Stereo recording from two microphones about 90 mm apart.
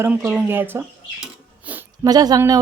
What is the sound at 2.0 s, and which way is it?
Speech, 45° right (ahead or behind).